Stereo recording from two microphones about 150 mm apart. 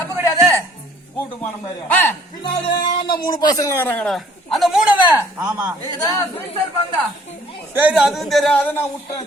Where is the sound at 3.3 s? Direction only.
25° left (ahead or behind).